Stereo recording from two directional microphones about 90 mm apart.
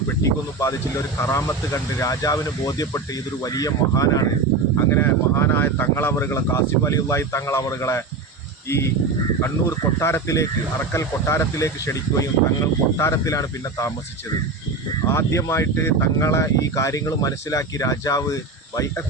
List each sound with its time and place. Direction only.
0.2 s speech: 35° left (ahead or behind)
4.9 s speech: 25° left (ahead or behind)
9.4 s speech: 30° left (ahead or behind)
15.0 s speech: 30° left (ahead or behind)